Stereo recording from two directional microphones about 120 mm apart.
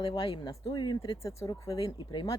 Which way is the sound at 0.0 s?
35° left (ahead or behind).